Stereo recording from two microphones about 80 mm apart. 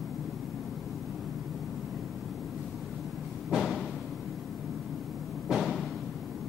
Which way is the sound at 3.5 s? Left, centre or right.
Centre.